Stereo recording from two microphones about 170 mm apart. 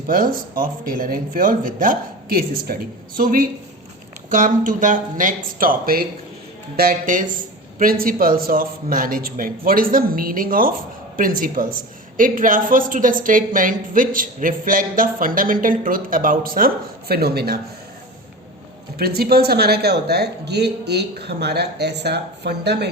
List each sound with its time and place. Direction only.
0.1 s speech: 55° right (ahead or behind)
18.9 s speech: 65° right (ahead or behind)